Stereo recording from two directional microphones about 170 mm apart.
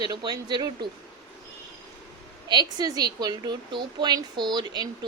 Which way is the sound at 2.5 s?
25° right (ahead or behind).